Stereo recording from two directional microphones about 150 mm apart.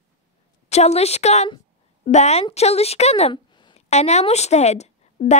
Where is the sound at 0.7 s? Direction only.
45° left (ahead or behind).